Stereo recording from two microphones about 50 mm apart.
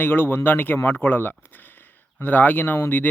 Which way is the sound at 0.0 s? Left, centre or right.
Left.